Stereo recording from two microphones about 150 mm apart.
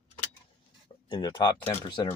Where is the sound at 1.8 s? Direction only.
30° left (ahead or behind).